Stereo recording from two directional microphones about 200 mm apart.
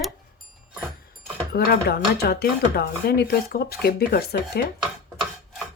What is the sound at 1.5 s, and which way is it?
Speech, 50° left (ahead or behind).